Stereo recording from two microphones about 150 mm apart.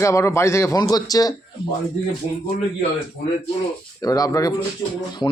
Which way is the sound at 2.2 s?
40° left (ahead or behind).